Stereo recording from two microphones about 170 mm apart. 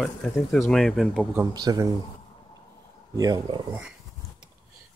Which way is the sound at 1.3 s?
20° right (ahead or behind).